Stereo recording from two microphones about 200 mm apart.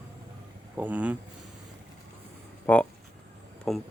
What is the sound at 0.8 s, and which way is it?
Speech, 10° right (ahead or behind).